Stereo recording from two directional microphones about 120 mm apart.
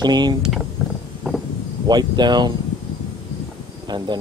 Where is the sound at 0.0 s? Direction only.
35° right (ahead or behind).